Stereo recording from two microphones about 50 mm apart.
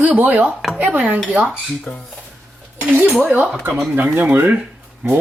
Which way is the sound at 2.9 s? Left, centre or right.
Right.